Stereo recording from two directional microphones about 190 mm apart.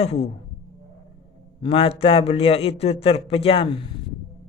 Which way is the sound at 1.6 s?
30° left (ahead or behind).